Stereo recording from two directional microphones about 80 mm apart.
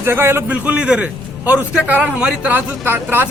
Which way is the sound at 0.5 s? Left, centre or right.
Centre.